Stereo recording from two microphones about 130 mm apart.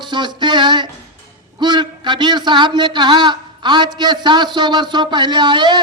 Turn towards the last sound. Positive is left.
turn(degrees=-35)  # may be behind; listen again after turning